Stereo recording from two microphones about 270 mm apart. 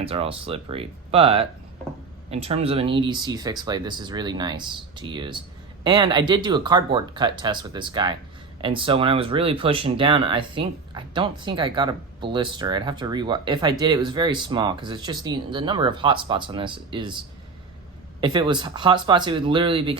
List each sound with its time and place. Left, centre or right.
0.0 s speech: right
18.2 s speech: centre